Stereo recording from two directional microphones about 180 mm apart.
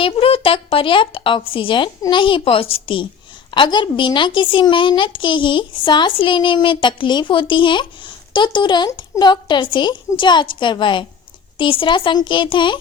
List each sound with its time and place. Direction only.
0.0 s a child's voice: 30° left (ahead or behind)